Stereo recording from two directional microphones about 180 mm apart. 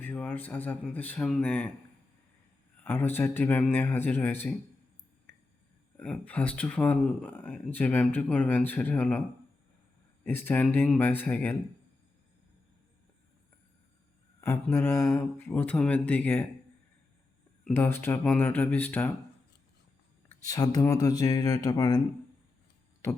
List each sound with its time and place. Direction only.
0.0 s speech: 10° left (ahead or behind)
2.8 s speech: 10° left (ahead or behind)
6.0 s speech: 5° left (ahead or behind)
10.2 s speech: 10° left (ahead or behind)
14.4 s speech: 15° left (ahead or behind)
17.7 s speech: 10° left (ahead or behind)
20.4 s speech: 20° left (ahead or behind)